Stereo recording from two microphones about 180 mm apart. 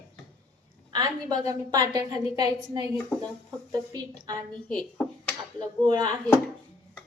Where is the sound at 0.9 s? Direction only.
20° right (ahead or behind).